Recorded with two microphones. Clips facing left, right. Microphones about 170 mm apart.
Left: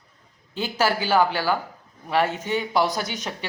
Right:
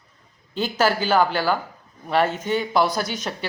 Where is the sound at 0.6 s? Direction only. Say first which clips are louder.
Right 2 dB; 10° left (ahead or behind).